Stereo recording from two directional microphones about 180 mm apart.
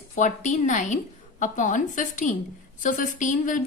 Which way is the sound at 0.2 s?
45° left (ahead or behind).